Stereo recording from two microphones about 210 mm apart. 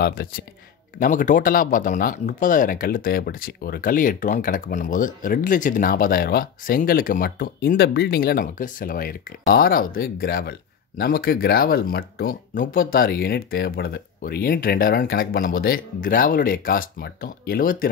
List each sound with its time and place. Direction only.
0.0 s speech: 45° left (ahead or behind)